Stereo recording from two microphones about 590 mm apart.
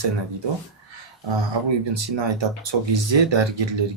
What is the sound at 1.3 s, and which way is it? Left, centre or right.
Speech, right.